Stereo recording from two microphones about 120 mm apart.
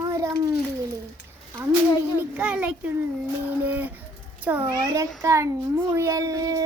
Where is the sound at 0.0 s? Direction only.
25° right (ahead or behind).